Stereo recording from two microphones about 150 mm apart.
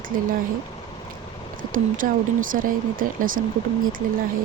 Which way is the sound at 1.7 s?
65° right (ahead or behind).